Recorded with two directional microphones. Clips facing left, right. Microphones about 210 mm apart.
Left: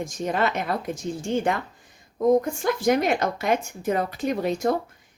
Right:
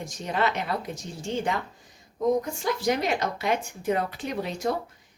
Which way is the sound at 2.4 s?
50° left (ahead or behind).